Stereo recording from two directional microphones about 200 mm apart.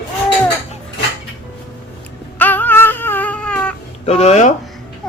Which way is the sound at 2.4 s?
10° left (ahead or behind).